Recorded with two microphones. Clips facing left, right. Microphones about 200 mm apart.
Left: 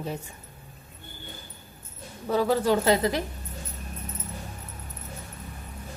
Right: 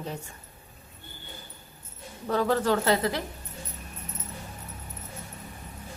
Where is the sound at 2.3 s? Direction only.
10° left (ahead or behind).